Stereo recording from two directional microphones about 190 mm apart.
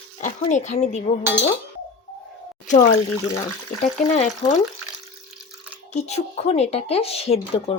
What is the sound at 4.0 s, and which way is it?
Speech, 40° left (ahead or behind).